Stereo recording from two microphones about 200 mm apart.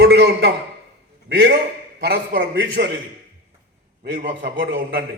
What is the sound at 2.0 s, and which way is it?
Speech, 55° right (ahead or behind).